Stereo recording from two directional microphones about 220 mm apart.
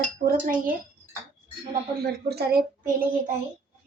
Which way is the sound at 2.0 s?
45° right (ahead or behind).